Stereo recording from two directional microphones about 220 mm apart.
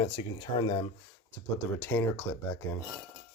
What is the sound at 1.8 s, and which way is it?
Speech, 10° left (ahead or behind).